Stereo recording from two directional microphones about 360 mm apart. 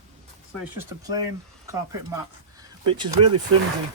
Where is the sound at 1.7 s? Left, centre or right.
Centre.